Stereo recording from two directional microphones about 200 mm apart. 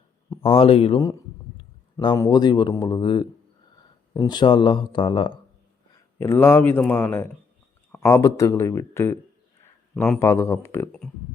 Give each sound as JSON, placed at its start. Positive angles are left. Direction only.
{"t": 0.3, "sound": "speech", "side_deg": 25}
{"t": 6.1, "sound": "speech", "side_deg": 10}
{"t": 9.9, "sound": "a man's voice", "side_deg": 0}
{"t": 10.2, "sound": "speech", "side_deg": 15}